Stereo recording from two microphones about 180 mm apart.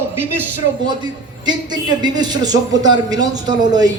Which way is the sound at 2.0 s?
25° right (ahead or behind).